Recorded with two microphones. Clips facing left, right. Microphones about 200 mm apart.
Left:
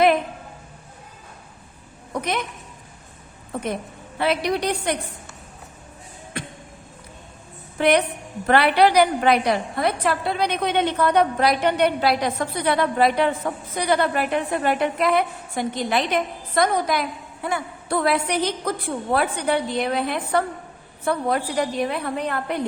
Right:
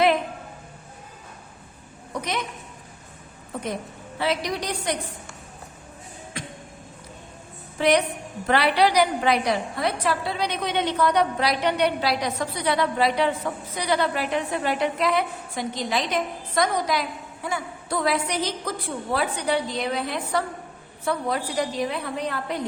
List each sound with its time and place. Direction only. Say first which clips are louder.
4.2 s a woman's voice: left 4 dB; 60° left (ahead or behind)
6.3 s a sound: left 4 dB; 60° left (ahead or behind)
7.8 s a woman's voice: left 2 dB; 60° left (ahead or behind)